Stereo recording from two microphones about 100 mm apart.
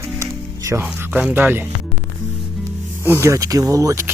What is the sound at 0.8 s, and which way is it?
Speech, 15° right (ahead or behind).